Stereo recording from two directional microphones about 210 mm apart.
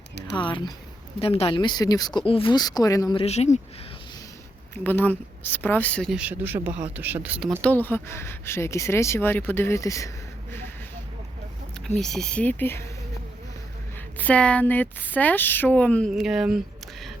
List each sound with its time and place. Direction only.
0.3 s speech: 25° left (ahead or behind)
3.2 s speech: 30° left (ahead or behind)
4.7 s speech: 10° left (ahead or behind); by 7.6 s 5° right (ahead or behind)
7.6 s speech: 10° left (ahead or behind)
11.9 s speech: centre (ahead or behind)
14.2 s speech: 5° left (ahead or behind)